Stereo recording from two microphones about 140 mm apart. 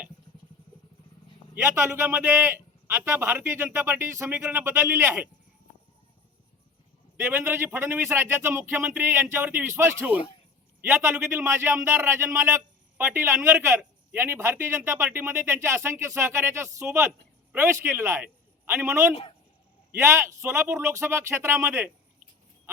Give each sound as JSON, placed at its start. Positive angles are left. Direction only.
{"t": 1.6, "sound": "speech", "side_deg": -15}
{"t": 7.2, "sound": "a man's voice", "side_deg": -15}